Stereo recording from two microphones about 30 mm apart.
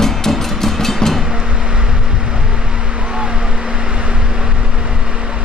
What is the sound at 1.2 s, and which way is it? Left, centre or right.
Vehicle, centre.